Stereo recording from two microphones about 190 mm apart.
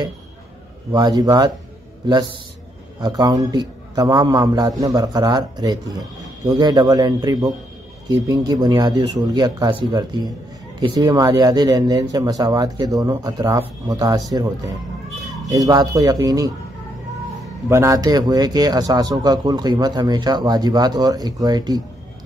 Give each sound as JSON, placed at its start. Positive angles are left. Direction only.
{"t": 0.9, "sound": "speech", "side_deg": -20}
{"t": 3.0, "sound": "speech", "side_deg": -20}
{"t": 17.6, "sound": "speech", "side_deg": -15}